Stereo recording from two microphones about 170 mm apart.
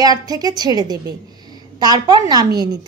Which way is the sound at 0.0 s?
25° right (ahead or behind).